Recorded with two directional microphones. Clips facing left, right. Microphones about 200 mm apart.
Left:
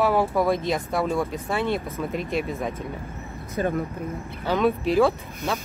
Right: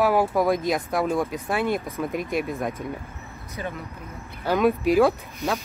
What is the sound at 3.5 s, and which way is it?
Speech, 50° left (ahead or behind).